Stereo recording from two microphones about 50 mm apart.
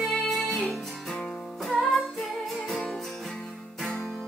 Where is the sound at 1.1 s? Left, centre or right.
Centre.